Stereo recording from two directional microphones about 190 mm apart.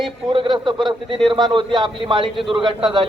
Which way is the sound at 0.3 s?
25° right (ahead or behind).